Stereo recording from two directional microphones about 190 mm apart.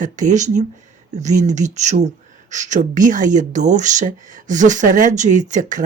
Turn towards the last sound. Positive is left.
turn(degrees=-40)  # may be behind; listen again after turning